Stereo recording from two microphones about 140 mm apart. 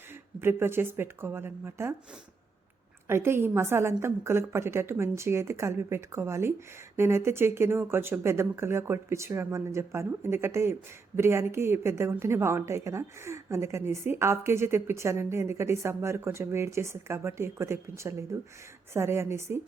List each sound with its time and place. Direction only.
0.1 s speech: 15° right (ahead or behind)
3.1 s a woman's voice: 15° right (ahead or behind)